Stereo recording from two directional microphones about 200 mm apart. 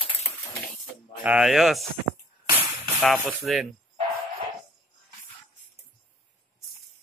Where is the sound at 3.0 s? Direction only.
Centre (ahead or behind).